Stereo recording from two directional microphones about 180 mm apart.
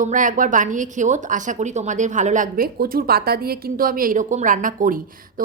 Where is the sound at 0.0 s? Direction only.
45° right (ahead or behind).